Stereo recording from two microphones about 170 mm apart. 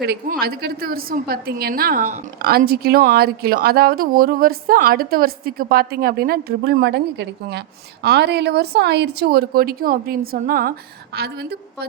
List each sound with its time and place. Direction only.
0.0 s a woman's voice: 65° right (ahead or behind)